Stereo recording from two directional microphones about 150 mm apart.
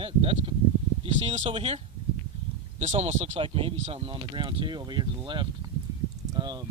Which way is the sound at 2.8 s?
45° right (ahead or behind).